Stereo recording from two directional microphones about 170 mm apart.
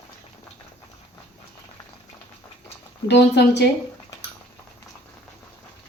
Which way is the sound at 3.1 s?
80° left.